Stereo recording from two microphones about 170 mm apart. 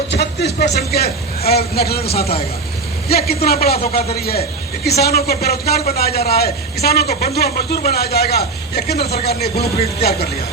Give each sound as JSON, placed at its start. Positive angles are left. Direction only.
{"t": 0.1, "sound": "a man's voice", "side_deg": 80}